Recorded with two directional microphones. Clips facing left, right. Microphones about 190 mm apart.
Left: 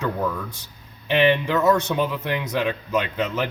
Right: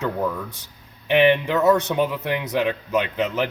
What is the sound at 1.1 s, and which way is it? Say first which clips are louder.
Speech: right 2 dB; 15° right (ahead or behind).